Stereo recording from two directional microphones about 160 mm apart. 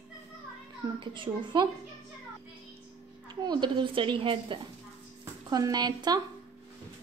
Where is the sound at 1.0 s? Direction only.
30° right (ahead or behind).